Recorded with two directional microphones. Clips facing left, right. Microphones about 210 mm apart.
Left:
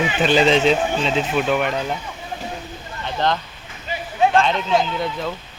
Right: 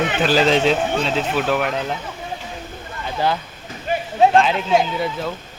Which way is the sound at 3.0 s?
10° right (ahead or behind).